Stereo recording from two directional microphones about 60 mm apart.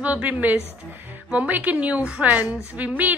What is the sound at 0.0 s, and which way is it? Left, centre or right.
A woman's voice, right.